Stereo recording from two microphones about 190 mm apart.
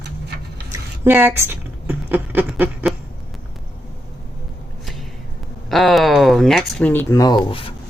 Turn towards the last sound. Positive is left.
turn(degrees=25)  # may be behind; listen again after turning